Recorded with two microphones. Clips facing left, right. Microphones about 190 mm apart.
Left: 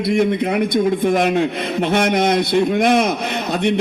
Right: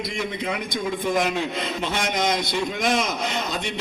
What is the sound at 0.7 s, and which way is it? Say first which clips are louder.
A man's voice: left 6 dB; 60° left (ahead or behind).